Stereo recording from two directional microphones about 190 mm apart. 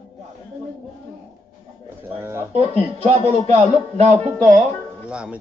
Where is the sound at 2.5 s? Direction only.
35° right (ahead or behind).